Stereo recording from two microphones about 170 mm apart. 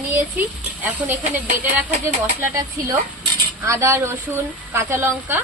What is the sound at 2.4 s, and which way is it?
Speech, 20° right (ahead or behind).